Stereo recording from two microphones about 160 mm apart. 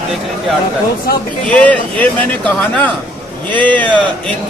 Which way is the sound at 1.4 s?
10° left (ahead or behind).